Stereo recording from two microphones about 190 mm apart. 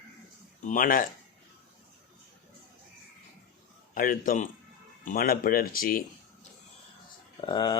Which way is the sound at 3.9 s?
45° left (ahead or behind).